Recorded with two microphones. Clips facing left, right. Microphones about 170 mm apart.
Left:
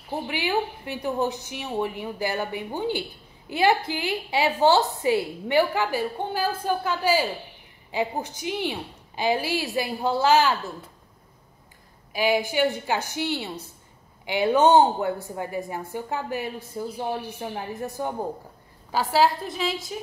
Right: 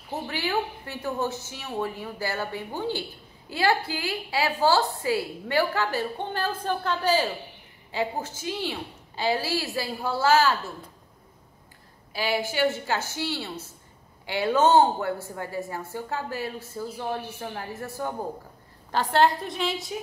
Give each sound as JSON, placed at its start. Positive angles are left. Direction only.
{"t": 0.3, "sound": "a woman's voice", "side_deg": 15}
{"t": 12.1, "sound": "a woman's voice", "side_deg": 15}